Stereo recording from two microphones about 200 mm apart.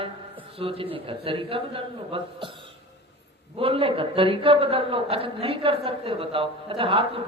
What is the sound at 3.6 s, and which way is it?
A man's voice, 30° right (ahead or behind).